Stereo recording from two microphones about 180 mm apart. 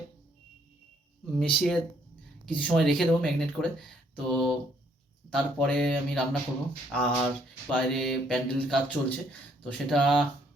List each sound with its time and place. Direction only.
1.4 s speech: centre (ahead or behind)